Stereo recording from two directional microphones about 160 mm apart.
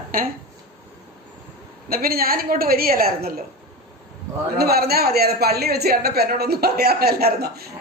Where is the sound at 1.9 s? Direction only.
70° right (ahead or behind).